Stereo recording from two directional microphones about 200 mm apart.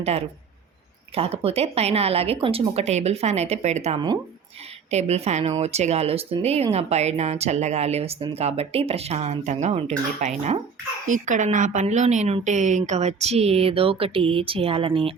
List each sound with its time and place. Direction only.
0.0 s speech: 30° right (ahead or behind)